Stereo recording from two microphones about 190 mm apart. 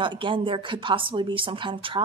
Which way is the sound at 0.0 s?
25° right (ahead or behind).